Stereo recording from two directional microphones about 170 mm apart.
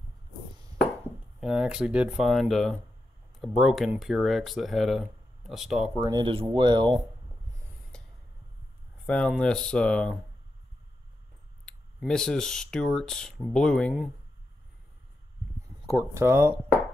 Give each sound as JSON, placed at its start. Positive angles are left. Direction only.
{"t": 1.4, "sound": "speech", "side_deg": -5}
{"t": 5.9, "sound": "speech", "side_deg": -25}
{"t": 9.0, "sound": "speech", "side_deg": 5}
{"t": 11.6, "sound": "speech", "side_deg": 5}
{"t": 15.9, "sound": "speech", "side_deg": -15}